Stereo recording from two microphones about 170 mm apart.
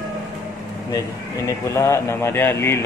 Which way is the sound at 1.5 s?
15° left (ahead or behind).